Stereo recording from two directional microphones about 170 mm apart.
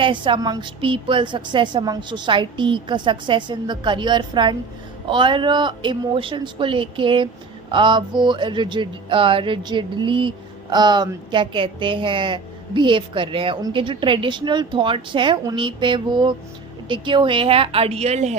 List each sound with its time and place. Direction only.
0.0 s a woman's voice: 30° right (ahead or behind)